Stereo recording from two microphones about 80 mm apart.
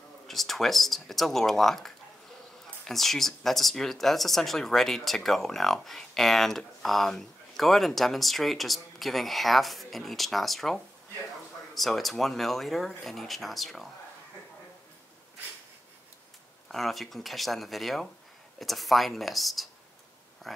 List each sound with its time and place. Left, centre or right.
0.3 s speech: centre
2.9 s speech: centre
16.6 s speech: centre